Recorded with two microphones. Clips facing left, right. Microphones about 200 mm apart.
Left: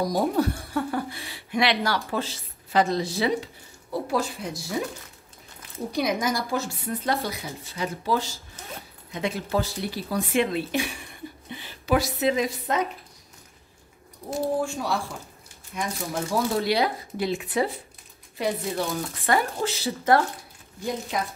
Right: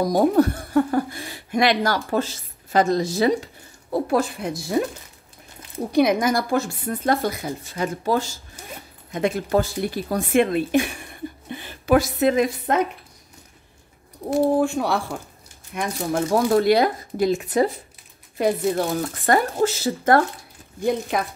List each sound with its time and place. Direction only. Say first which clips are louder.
0.0 s speech: right 6 dB; 50° right (ahead or behind)
3.9 s speech: right 5 dB; 55° right (ahead or behind)
5.9 s speech: right 7 dB; 60° right (ahead or behind)
8.6 s zipper: right 2 dB; 10° right (ahead or behind)
9.1 s speech: right 6 dB; 50° right (ahead or behind)
14.3 s speech: right 7 dB; 60° right (ahead or behind)